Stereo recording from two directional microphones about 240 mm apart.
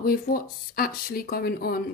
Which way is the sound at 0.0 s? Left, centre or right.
Left.